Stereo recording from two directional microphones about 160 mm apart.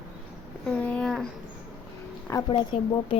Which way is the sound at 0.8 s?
5° left (ahead or behind).